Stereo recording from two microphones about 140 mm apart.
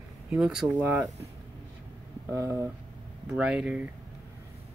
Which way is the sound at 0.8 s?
15° right (ahead or behind).